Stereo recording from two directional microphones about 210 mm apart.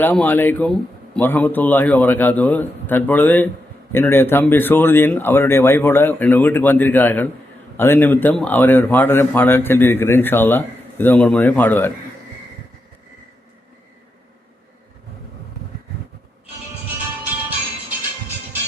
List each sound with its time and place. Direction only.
0.0 s a man's voice: 5° left (ahead or behind)